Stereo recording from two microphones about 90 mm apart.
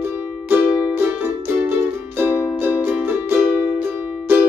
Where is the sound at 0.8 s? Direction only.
20° right (ahead or behind).